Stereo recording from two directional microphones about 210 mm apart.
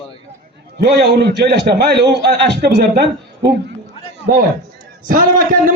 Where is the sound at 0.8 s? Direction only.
50° right (ahead or behind).